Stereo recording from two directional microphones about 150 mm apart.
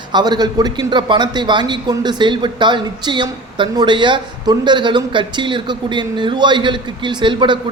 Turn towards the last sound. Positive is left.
turn(degrees=-30)  # may be behind; listen again after turning